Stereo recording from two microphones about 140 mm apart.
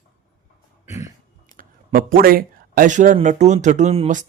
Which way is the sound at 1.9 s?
90° right.